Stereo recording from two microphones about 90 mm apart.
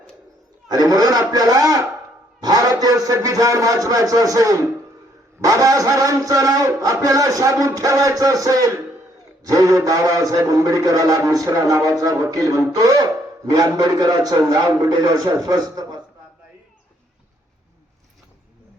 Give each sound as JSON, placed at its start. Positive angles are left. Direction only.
{"t": 0.7, "sound": "a man's voice", "side_deg": -45}
{"t": 2.4, "sound": "a sound", "side_deg": -45}
{"t": 2.8, "sound": "a man's voice", "side_deg": -40}